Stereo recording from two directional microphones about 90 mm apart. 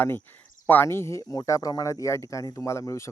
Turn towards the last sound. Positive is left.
turn(degrees=35)  # may be behind; listen again after turning